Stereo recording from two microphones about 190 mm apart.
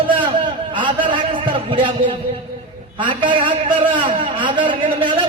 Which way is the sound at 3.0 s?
25° right (ahead or behind).